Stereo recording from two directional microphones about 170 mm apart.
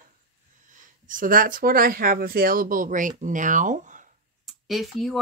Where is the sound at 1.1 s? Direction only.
55° right (ahead or behind).